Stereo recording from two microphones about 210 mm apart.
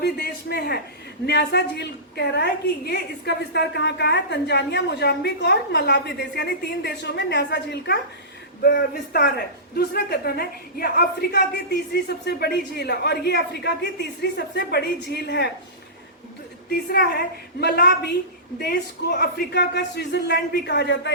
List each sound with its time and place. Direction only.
0.0 s a woman's voice: 50° left (ahead or behind)
16.6 s a woman's voice: 50° left (ahead or behind)